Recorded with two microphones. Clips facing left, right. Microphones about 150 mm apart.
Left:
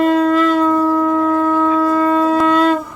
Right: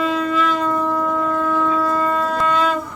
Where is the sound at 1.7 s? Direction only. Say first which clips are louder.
Left 6 dB; 40° left (ahead or behind).